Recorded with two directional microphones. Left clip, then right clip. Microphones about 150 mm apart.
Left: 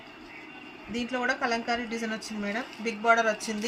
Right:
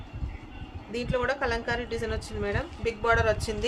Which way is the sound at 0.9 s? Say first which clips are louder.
Right 1 dB; 90° right.